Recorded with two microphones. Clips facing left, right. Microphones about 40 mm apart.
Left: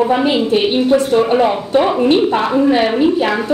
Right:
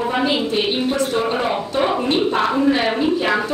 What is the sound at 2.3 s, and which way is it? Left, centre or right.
A woman's voice, centre.